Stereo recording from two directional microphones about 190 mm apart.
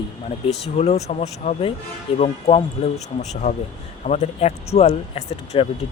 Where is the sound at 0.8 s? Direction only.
35° left (ahead or behind).